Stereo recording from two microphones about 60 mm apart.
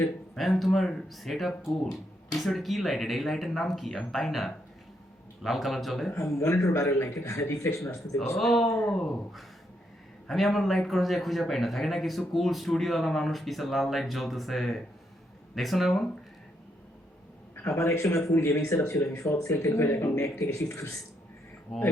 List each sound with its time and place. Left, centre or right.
0.3 s a man's voice: centre
6.3 s speech: left
8.4 s a man's voice: centre
17.5 s a man's voice: left
20.1 s speech: left